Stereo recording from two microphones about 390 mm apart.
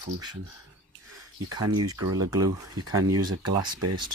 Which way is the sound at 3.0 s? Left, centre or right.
Right.